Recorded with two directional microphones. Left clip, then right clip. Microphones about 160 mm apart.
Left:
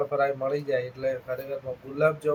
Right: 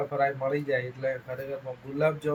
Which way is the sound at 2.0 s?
10° left (ahead or behind).